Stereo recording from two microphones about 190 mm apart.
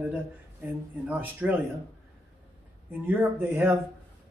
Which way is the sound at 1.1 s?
10° right (ahead or behind).